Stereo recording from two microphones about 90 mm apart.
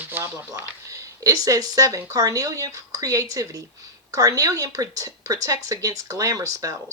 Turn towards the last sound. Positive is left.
turn(degrees=-40)  # may be behind; listen again after turning